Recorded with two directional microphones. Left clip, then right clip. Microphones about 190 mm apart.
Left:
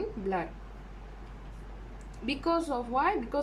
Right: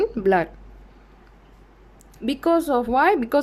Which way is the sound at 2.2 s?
40° right (ahead or behind).